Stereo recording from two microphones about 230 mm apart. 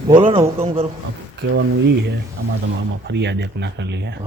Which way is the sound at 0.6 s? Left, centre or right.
Right.